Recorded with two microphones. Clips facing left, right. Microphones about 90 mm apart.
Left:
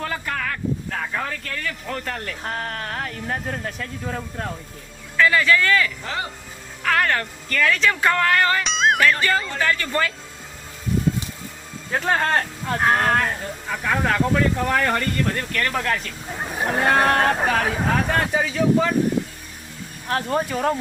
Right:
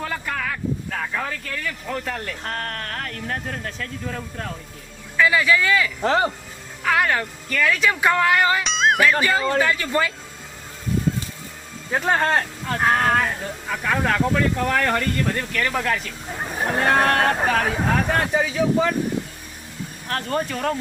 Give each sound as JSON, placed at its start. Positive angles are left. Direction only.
{"t": 0.0, "sound": "speech", "side_deg": 0}
{"t": 5.1, "sound": "speech", "side_deg": -10}
{"t": 6.0, "sound": "speech", "side_deg": -35}
{"t": 6.8, "sound": "speech", "side_deg": -10}
{"t": 11.9, "sound": "speech", "side_deg": -5}
{"t": 20.1, "sound": "speech", "side_deg": 5}